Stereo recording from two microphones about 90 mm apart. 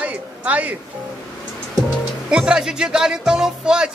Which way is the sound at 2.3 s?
5° right (ahead or behind).